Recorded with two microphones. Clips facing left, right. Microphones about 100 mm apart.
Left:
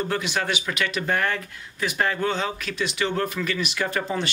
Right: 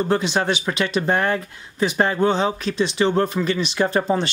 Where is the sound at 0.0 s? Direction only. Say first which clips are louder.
Right 6 dB; 30° right (ahead or behind).